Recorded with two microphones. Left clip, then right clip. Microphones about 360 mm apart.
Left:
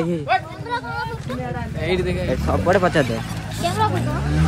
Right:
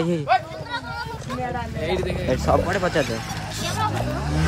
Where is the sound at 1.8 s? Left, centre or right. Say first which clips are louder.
Left 4 dB; centre.